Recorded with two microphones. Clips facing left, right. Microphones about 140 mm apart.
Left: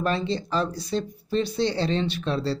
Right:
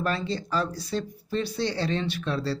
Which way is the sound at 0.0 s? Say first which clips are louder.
Left 3 dB; 20° left (ahead or behind).